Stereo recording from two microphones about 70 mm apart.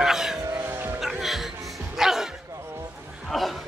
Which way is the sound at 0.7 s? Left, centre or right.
Right.